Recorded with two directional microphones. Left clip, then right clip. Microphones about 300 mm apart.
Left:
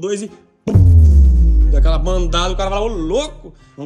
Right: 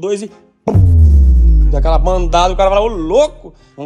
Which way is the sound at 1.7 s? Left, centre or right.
Centre.